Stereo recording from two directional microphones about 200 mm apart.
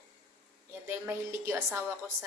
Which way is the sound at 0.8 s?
10° right (ahead or behind).